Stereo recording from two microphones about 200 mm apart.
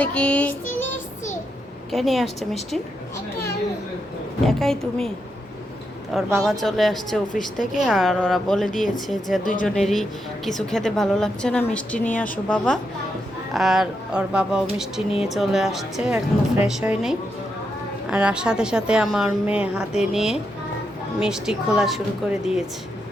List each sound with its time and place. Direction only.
0.0 s child singing: 5° left (ahead or behind)
1.9 s speech: centre (ahead or behind)
4.4 s speech: centre (ahead or behind)
6.4 s speech: centre (ahead or behind)
9.4 s speech: 40° left (ahead or behind)
9.6 s speech: centre (ahead or behind)